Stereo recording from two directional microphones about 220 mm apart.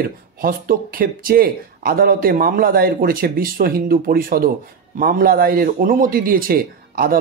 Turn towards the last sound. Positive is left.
turn(degrees=-40)  # may be behind; listen again after turning